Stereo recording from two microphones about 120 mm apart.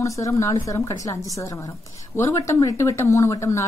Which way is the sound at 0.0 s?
25° left (ahead or behind).